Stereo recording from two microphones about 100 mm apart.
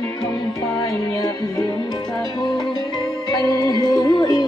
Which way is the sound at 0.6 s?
35° left (ahead or behind).